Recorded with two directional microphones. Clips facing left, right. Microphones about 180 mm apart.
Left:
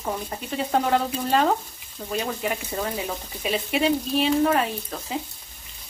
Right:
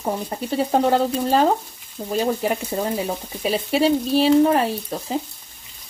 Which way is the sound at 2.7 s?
25° right (ahead or behind).